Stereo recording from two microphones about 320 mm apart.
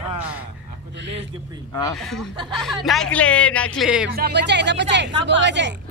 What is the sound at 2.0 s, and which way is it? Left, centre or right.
Speech, centre.